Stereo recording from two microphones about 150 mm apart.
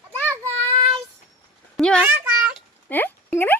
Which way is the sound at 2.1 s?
10° right (ahead or behind).